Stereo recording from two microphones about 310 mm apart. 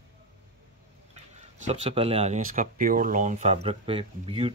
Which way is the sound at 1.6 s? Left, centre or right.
Right.